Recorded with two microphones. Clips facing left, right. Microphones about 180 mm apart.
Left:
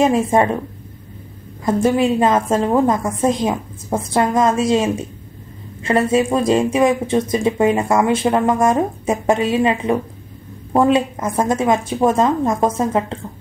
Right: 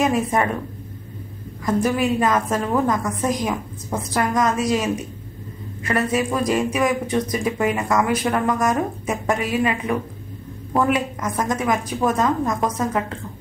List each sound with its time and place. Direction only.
0.0 s speech: 25° left (ahead or behind)
1.6 s speech: 25° left (ahead or behind)